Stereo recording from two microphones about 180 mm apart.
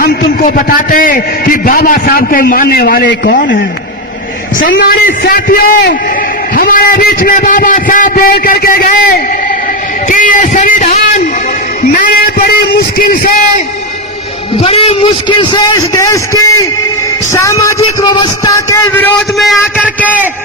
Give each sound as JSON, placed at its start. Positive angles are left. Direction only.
{"t": 0.0, "sound": "a man's voice", "side_deg": 55}
{"t": 4.6, "sound": "a man's voice", "side_deg": 55}
{"t": 11.9, "sound": "a sound", "side_deg": 50}
{"t": 13.0, "sound": "a man's voice", "side_deg": 50}
{"t": 14.6, "sound": "a man's voice", "side_deg": 30}
{"t": 19.4, "sound": "speech", "side_deg": 0}